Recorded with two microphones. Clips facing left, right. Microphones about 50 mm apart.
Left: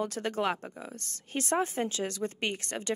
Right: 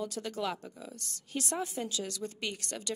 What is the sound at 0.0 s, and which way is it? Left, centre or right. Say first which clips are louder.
Speech: left 5 dB; left.